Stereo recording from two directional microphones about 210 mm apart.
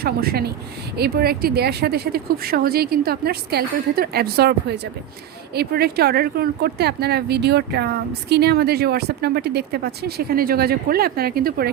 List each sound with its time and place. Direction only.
0.0 s a woman's voice: 45° right (ahead or behind)